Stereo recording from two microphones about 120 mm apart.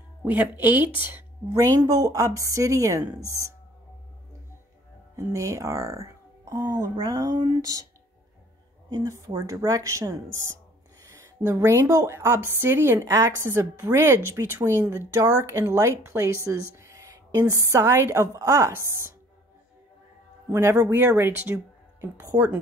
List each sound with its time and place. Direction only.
0.2 s a woman's voice: 15° right (ahead or behind)
1.5 s speech: 25° right (ahead or behind)
5.1 s speech: 25° right (ahead or behind)
8.8 s a sound: 35° right (ahead or behind)
9.3 s a woman's voice: 25° right (ahead or behind)
20.5 s speech: 20° right (ahead or behind)
22.2 s speech: 30° right (ahead or behind)